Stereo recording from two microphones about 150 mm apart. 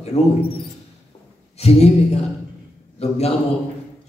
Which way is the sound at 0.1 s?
45° left (ahead or behind).